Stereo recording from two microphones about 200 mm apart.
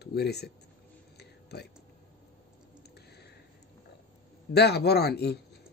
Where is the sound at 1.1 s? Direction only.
55° left (ahead or behind).